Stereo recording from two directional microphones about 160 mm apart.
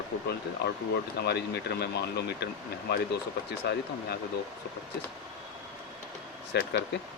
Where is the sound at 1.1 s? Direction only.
90° left.